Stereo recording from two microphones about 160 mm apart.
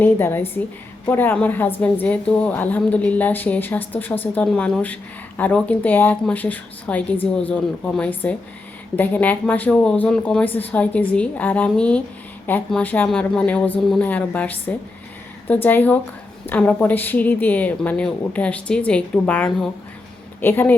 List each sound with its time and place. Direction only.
0.0 s a woman's voice: 10° left (ahead or behind)